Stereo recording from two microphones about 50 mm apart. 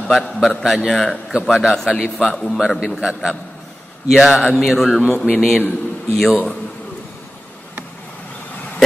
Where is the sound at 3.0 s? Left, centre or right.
Centre.